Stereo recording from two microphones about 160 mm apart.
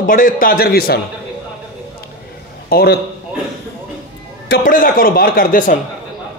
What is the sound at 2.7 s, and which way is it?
Speech, 75° left (ahead or behind).